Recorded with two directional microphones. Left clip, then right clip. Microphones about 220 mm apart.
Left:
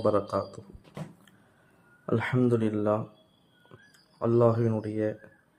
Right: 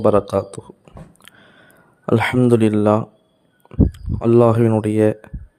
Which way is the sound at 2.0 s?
45° right (ahead or behind).